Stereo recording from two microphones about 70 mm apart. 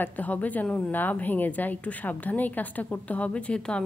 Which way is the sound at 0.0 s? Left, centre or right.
Left.